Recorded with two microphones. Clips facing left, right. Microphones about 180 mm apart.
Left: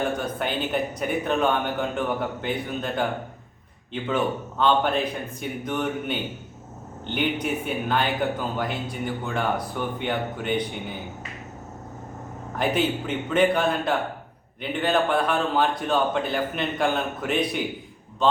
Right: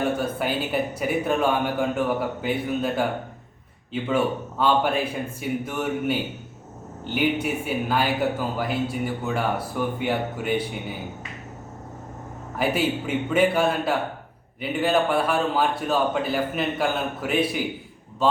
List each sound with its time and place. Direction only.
0.2 s a man's voice: 5° right (ahead or behind)
12.5 s a man's voice: 5° right (ahead or behind)